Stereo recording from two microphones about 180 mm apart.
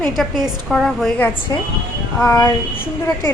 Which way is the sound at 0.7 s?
Centre (ahead or behind).